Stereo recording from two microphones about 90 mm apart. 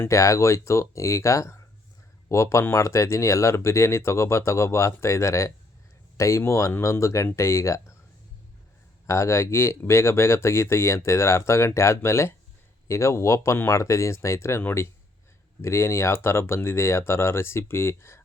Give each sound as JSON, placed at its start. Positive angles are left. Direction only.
{"t": 0.1, "sound": "speech", "side_deg": 35}
{"t": 9.0, "sound": "speech", "side_deg": 35}